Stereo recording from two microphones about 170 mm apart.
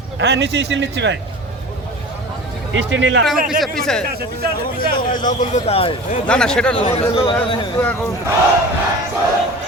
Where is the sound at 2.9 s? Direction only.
90° right.